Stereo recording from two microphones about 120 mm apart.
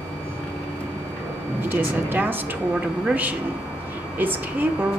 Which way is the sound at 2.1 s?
15° right (ahead or behind).